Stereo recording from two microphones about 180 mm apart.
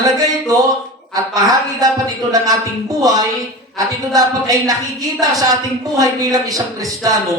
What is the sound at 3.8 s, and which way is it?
A man's voice, 20° right (ahead or behind).